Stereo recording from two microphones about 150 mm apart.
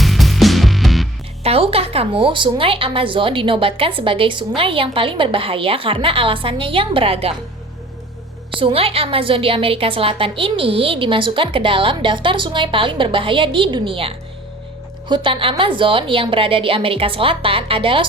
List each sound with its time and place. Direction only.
0.0 s music: centre (ahead or behind)
1.5 s speech: 40° right (ahead or behind)
8.4 s speech: 35° right (ahead or behind)